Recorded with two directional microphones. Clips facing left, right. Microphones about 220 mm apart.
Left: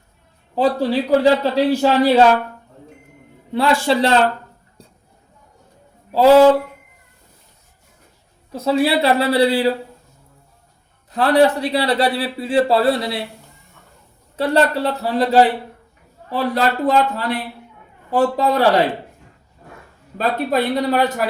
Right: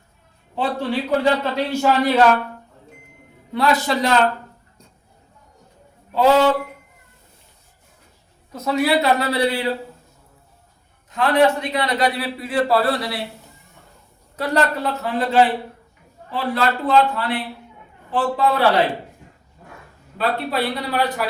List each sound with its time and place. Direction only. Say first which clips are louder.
0.5 s a man's voice: left 5 dB; 35° left (ahead or behind)
3.5 s a man's voice: left 3 dB; 30° left (ahead or behind)
4.8 s music: left 6 dB; 30° left (ahead or behind)
6.1 s speech: left 5 dB; 35° left (ahead or behind)
8.5 s a man's voice: left 2 dB; 30° left (ahead or behind)
11.1 s a man's voice: left 2 dB; 35° left (ahead or behind)
14.3 s a man's voice: left 4 dB; 30° left (ahead or behind)
20.1 s a man's voice: left 3 dB; 45° left (ahead or behind)